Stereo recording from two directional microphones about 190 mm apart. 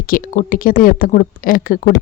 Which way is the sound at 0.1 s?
45° left (ahead or behind).